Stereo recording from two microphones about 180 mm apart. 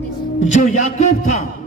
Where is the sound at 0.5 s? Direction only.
40° left (ahead or behind).